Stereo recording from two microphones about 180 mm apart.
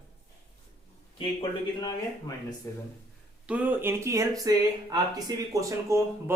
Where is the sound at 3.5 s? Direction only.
10° right (ahead or behind).